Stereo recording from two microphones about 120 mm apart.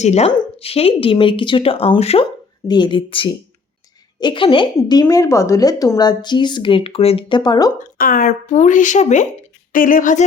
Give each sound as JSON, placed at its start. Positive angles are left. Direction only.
{"t": 0.0, "sound": "a woman's voice", "side_deg": 65}
{"t": 0.6, "sound": "speech", "side_deg": 55}
{"t": 2.6, "sound": "speech", "side_deg": 40}
{"t": 7.9, "sound": "speech", "side_deg": 90}